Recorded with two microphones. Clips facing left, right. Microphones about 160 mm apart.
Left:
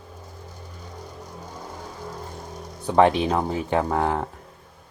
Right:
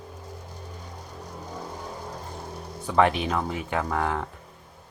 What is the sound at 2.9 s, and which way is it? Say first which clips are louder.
Speech: left 4 dB; 30° left (ahead or behind).